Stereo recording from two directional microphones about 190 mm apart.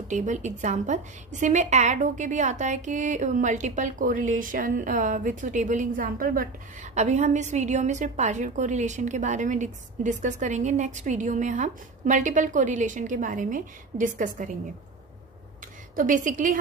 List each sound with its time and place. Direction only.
0.1 s a woman's voice: 40° right (ahead or behind)
16.0 s a woman's voice: 45° right (ahead or behind)